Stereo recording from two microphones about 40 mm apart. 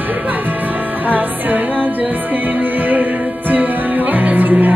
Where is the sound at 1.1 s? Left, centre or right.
Right.